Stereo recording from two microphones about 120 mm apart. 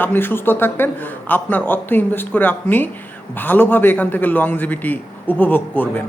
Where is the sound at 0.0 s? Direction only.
15° left (ahead or behind).